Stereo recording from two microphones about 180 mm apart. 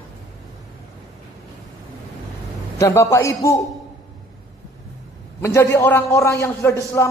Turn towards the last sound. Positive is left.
turn(degrees=15)  # may be behind; listen again after turning